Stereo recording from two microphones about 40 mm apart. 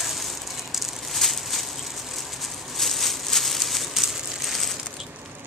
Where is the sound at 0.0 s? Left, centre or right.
Centre.